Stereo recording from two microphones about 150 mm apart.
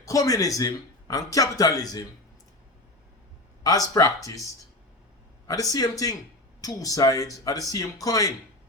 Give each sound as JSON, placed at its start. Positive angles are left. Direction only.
{"t": 0.0, "sound": "a man's voice", "side_deg": 25}
{"t": 3.6, "sound": "a man's voice", "side_deg": 25}
{"t": 5.5, "sound": "a man's voice", "side_deg": 25}